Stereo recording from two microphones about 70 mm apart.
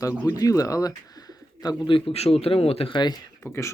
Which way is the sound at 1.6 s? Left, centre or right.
Left.